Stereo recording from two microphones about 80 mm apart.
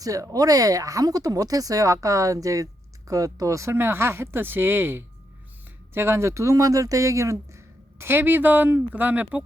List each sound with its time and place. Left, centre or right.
0.0 s speech: right